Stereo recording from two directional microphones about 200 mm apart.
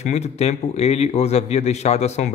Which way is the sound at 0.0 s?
35° left (ahead or behind).